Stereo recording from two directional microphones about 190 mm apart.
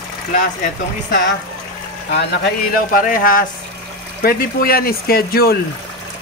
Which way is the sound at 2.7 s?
45° left (ahead or behind).